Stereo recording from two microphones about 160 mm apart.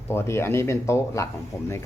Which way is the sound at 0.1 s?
15° left (ahead or behind).